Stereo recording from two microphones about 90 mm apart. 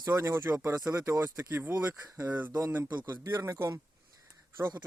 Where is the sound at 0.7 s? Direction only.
40° right (ahead or behind).